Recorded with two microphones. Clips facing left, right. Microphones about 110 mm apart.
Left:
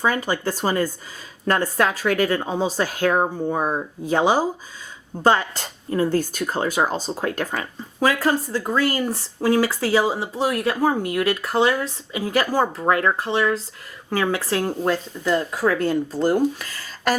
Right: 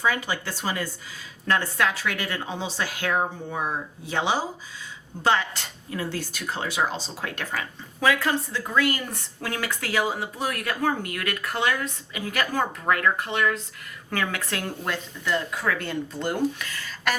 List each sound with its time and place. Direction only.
0.0 s a woman's voice: 45° left (ahead or behind)